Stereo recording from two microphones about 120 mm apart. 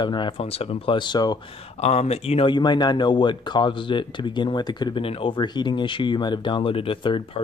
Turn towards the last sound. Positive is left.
turn(degrees=45)  # may be behind; listen again after turning